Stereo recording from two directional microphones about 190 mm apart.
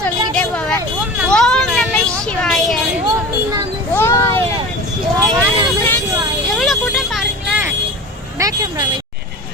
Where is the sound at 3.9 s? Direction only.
15° left (ahead or behind).